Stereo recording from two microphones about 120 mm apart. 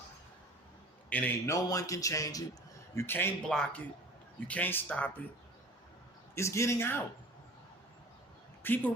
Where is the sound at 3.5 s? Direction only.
5° left (ahead or behind).